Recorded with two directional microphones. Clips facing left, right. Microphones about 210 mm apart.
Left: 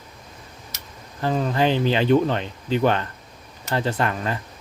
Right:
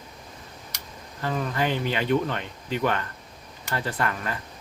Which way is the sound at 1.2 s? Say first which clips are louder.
Left 6 dB; 30° left (ahead or behind).